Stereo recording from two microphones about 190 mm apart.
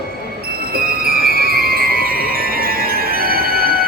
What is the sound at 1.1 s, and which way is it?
Music, 50° right (ahead or behind).